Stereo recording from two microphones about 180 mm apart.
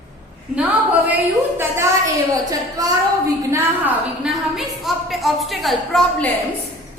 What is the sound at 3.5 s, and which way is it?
A woman's voice, 5° right (ahead or behind).